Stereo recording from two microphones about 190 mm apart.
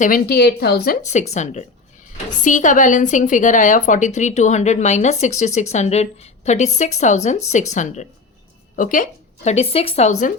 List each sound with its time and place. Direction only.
0.0 s speech: 50° left (ahead or behind)
1.3 s a woman's voice: 40° left (ahead or behind)